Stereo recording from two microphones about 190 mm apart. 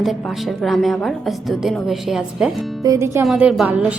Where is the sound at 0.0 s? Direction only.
Centre (ahead or behind).